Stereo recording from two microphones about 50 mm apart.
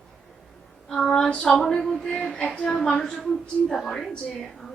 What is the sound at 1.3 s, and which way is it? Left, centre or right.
A woman's voice, left.